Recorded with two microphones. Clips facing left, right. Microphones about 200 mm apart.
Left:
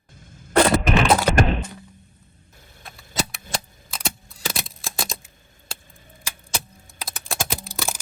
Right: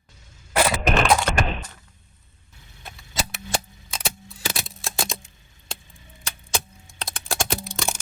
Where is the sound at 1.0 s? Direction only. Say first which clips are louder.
Left 1 dB; 5° left (ahead or behind).